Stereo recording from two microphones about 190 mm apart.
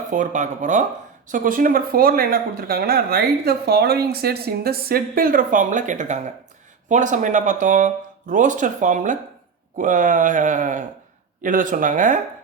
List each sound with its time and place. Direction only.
0.1 s speech: 40° right (ahead or behind)